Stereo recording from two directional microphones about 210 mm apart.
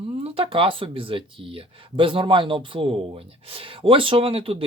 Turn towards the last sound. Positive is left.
turn(degrees=-25)  # may be behind; listen again after turning